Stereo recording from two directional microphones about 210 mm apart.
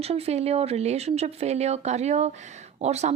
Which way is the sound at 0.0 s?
30° right (ahead or behind).